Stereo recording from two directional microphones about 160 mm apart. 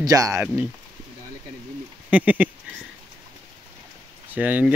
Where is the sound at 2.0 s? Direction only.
10° right (ahead or behind).